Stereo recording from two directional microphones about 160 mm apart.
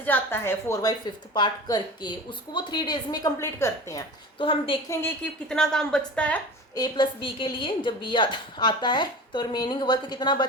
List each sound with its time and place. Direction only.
0.0 s a woman's voice: 10° left (ahead or behind)
4.4 s a woman's voice: 30° left (ahead or behind)
4.9 s a woman's voice: 15° left (ahead or behind)
5.5 s speech: 5° left (ahead or behind)
6.7 s a woman's voice: 25° left (ahead or behind)